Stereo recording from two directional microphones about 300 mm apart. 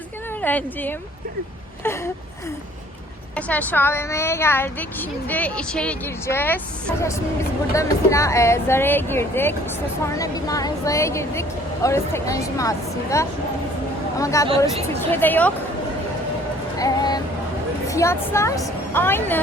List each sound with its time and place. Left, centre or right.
0.4 s speech: centre
3.3 s speech: centre
7.7 s speech: centre
16.7 s vehicle: centre
17.8 s a woman's voice: centre